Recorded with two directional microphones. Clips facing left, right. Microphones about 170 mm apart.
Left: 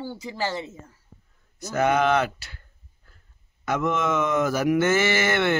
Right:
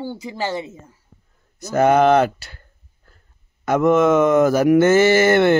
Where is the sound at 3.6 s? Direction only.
45° right (ahead or behind).